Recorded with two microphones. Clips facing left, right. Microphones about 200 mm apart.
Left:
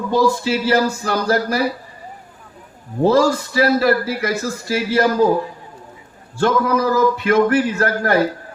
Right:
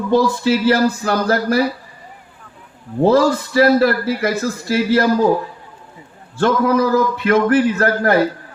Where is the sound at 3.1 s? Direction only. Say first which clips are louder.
Right 2 dB; 55° right (ahead or behind).